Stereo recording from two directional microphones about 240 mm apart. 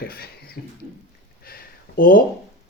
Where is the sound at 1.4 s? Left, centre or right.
Left.